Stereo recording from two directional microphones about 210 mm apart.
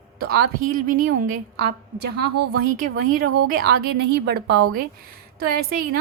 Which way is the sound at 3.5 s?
50° right (ahead or behind).